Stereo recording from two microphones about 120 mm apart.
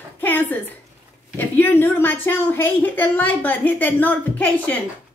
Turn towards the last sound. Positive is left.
turn(degrees=15)  # may be behind; listen again after turning